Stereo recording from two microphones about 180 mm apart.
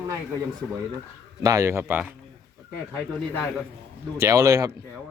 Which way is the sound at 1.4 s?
15° right (ahead or behind).